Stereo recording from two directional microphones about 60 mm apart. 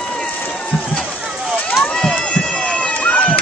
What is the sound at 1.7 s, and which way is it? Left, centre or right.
Run, centre.